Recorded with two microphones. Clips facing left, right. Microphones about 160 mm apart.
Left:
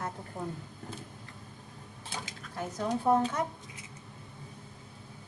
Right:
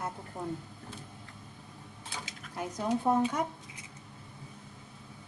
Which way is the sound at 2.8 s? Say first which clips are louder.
Left 1 dB; 10° right (ahead or behind).